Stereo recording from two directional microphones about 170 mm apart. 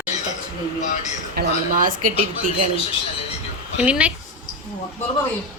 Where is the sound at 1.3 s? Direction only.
55° right (ahead or behind).